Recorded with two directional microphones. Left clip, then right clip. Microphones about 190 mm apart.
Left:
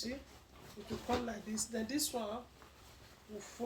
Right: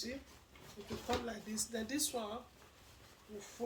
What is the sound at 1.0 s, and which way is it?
Speech, 25° right (ahead or behind).